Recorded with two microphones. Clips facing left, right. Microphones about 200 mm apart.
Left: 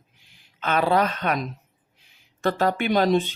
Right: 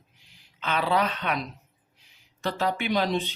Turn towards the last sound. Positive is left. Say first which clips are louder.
# left 6 dB
turn(degrees=50)  # may be behind; listen again after turning